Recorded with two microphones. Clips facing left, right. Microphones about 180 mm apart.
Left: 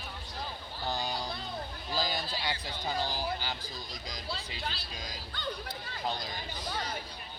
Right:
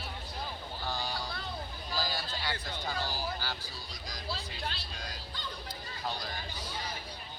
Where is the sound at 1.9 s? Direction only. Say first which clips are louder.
Left 3 dB; 15° left (ahead or behind).